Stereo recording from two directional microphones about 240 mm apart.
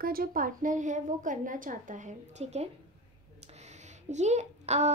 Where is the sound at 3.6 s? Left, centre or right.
Right.